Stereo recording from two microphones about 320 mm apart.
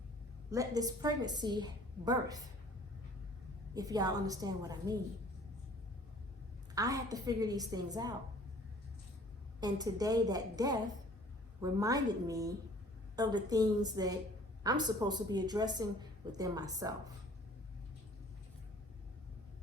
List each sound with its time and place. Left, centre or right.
0.5 s a woman's voice: centre
3.8 s a woman's voice: centre
6.7 s a woman's voice: centre
9.6 s a woman's voice: centre